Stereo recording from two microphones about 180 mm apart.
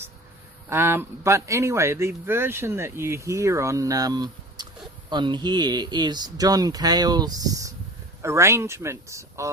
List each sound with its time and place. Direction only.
0.7 s speech: 10° right (ahead or behind)